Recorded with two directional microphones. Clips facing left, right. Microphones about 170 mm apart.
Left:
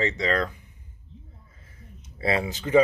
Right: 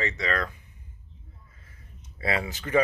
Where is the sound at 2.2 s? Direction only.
25° left (ahead or behind).